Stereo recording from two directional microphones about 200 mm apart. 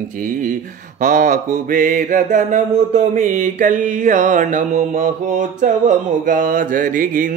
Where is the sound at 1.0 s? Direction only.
40° right (ahead or behind).